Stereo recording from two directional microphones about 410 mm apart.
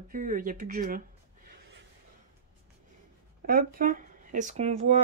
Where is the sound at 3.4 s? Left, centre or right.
Right.